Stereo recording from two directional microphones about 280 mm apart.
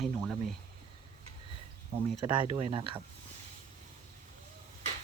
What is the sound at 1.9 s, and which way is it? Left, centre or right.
Speech, right.